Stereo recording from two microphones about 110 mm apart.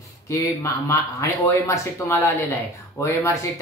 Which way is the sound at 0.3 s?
25° left (ahead or behind).